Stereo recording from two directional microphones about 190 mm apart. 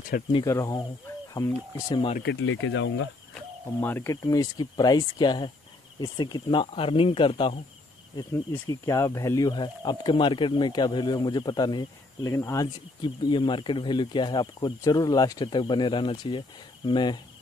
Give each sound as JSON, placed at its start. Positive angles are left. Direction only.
{"t": 0.3, "sound": "speech", "side_deg": 20}
{"t": 2.2, "sound": "speech", "side_deg": 90}
{"t": 3.8, "sound": "speech", "side_deg": 10}